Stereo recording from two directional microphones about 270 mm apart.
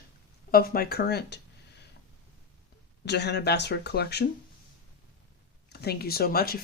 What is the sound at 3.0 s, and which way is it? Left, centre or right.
Speech, left.